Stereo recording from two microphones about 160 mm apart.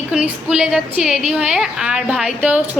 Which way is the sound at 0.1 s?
5° right (ahead or behind).